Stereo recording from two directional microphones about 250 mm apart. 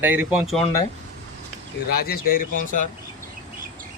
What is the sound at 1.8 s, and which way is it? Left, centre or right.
Speech, left.